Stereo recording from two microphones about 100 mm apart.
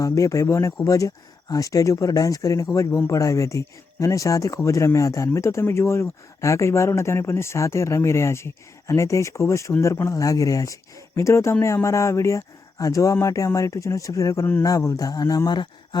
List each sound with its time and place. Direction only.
0.0 s speech: 30° left (ahead or behind); by 16.0 s 45° left (ahead or behind)